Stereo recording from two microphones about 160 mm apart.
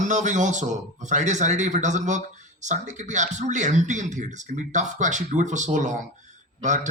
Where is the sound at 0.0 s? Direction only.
50° right (ahead or behind).